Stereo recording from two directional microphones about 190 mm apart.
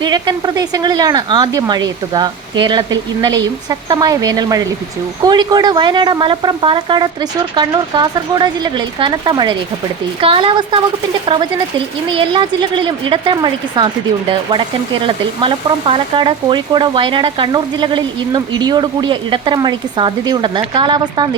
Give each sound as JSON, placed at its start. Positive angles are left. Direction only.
{"t": 0.0, "sound": "speech", "side_deg": -20}
{"t": 12.0, "sound": "speech", "side_deg": -25}